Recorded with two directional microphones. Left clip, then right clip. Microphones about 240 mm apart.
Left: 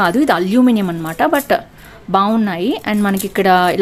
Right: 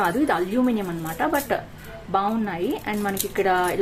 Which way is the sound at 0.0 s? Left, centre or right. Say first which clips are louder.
Left 8 dB; left.